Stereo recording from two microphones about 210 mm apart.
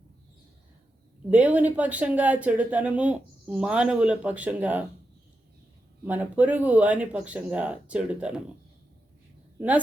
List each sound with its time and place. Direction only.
1.3 s speech: 5° right (ahead or behind)
6.1 s speech: 5° right (ahead or behind)